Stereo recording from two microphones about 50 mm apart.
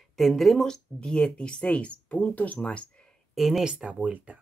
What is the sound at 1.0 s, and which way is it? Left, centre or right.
Speech, centre.